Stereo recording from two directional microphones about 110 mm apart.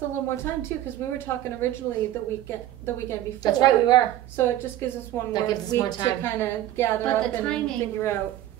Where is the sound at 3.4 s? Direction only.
40° left (ahead or behind).